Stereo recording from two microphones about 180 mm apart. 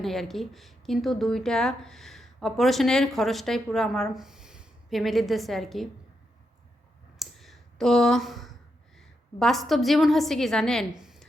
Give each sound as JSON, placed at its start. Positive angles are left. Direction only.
{"t": 0.0, "sound": "a woman's voice", "side_deg": 0}
{"t": 7.2, "sound": "a sound", "side_deg": 0}
{"t": 9.0, "sound": "a woman's voice", "side_deg": 0}